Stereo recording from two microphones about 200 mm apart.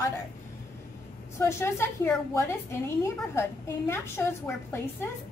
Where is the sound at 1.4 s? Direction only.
10° left (ahead or behind).